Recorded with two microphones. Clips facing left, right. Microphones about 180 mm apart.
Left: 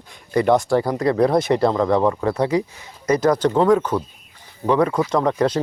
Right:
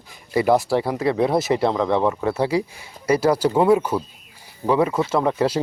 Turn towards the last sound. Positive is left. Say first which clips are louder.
# left 1 dB
turn(degrees=-10)  # may be behind; listen again after turning